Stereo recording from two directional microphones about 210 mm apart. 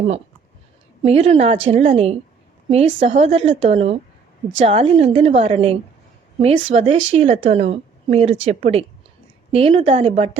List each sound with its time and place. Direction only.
1.0 s speech: 30° right (ahead or behind)